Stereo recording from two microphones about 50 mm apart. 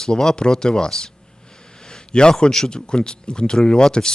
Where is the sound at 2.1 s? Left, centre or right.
Centre.